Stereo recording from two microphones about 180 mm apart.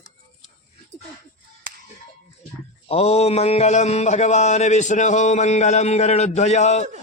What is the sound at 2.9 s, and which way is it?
Mantra, 35° left (ahead or behind).